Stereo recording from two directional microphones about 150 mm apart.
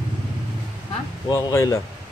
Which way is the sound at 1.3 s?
25° left (ahead or behind).